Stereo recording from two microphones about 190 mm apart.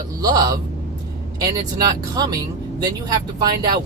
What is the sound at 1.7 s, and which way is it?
Speech, 20° right (ahead or behind).